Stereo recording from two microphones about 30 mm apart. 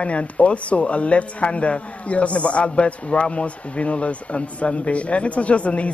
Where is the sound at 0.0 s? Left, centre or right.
Left.